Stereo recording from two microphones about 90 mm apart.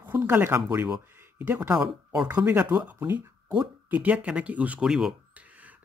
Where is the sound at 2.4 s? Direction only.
20° right (ahead or behind).